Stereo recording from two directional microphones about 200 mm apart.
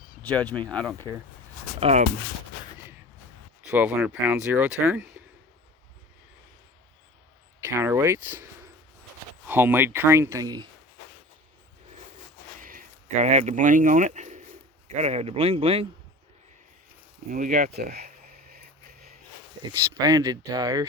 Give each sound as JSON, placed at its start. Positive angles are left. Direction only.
{"t": 0.2, "sound": "speech", "side_deg": 5}
{"t": 1.8, "sound": "a man's voice", "side_deg": -30}
{"t": 3.7, "sound": "speech", "side_deg": -10}
{"t": 7.6, "sound": "speech", "side_deg": -10}
{"t": 9.5, "sound": "speech", "side_deg": -10}
{"t": 12.5, "sound": "a sound", "side_deg": -45}
{"t": 14.8, "sound": "a man's voice", "side_deg": -35}
{"t": 17.2, "sound": "a sound", "side_deg": -40}
{"t": 20.0, "sound": "speech", "side_deg": -20}